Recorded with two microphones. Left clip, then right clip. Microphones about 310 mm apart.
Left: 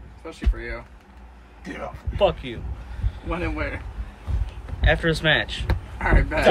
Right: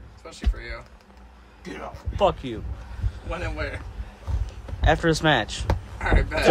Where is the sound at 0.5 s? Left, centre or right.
Centre.